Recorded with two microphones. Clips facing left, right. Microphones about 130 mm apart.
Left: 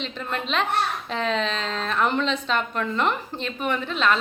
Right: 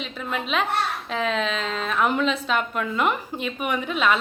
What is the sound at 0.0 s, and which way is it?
A woman's voice, 5° right (ahead or behind).